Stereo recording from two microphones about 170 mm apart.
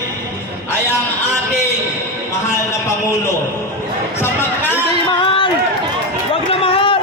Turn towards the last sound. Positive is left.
turn(degrees=30)  # may be behind; listen again after turning